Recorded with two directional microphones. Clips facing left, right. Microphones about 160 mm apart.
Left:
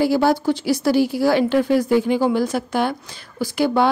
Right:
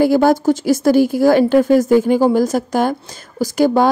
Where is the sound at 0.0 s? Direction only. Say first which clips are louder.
Right 5 dB; 50° right (ahead or behind).